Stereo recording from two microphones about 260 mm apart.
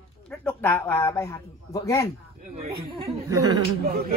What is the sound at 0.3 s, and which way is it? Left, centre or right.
Speech, centre.